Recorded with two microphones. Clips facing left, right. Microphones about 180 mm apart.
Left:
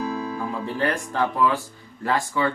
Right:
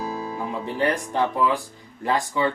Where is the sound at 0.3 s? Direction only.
20° right (ahead or behind).